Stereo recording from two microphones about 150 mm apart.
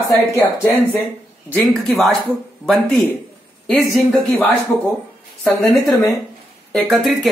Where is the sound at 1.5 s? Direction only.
5° left (ahead or behind).